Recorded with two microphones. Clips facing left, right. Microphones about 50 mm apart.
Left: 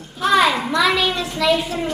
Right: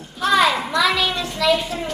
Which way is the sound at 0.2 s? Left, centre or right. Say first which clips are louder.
Left 1 dB; centre.